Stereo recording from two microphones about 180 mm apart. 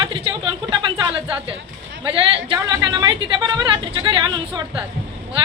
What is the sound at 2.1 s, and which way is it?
A woman's voice, 30° right (ahead or behind).